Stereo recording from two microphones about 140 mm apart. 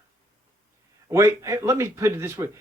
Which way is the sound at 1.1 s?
20° right (ahead or behind).